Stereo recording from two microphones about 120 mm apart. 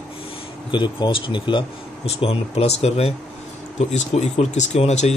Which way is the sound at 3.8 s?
70° left (ahead or behind).